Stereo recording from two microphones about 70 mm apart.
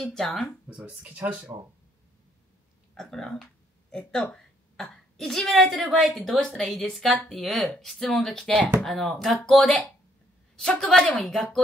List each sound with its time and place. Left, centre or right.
0.0 s speech: centre
0.7 s speech: centre
2.9 s a woman's voice: centre